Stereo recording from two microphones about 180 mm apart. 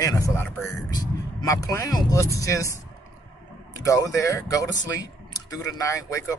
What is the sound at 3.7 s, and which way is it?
Speech, 20° left (ahead or behind).